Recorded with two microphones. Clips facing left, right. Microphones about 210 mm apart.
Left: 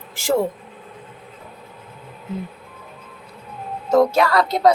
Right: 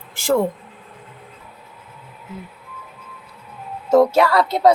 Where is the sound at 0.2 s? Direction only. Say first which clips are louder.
Right 1 dB; 50° right (ahead or behind).